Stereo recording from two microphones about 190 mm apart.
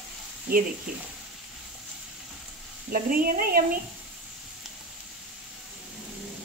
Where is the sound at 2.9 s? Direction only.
50° right (ahead or behind).